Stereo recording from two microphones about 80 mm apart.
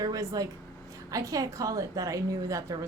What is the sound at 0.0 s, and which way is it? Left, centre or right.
A woman's voice, right.